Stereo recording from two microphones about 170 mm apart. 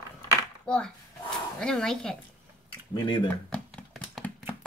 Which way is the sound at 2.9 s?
25° left (ahead or behind).